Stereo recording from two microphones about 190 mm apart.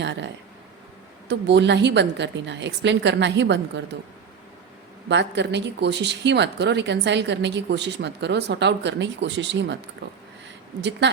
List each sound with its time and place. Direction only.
0.0 s speech: 65° right (ahead or behind)
1.3 s a woman's voice: 65° right (ahead or behind)
5.0 s speech: 65° right (ahead or behind)
10.8 s speech: 65° right (ahead or behind)